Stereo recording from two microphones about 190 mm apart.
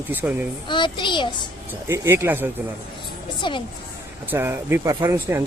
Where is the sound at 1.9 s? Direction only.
15° right (ahead or behind).